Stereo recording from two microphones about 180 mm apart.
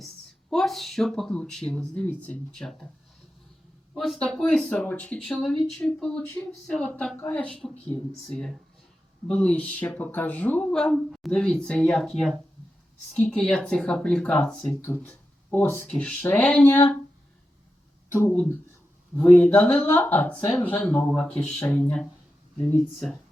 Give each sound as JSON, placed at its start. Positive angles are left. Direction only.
{"t": 0.5, "sound": "speech", "side_deg": 0}
{"t": 3.9, "sound": "speech", "side_deg": 0}
{"t": 18.2, "sound": "speech", "side_deg": 10}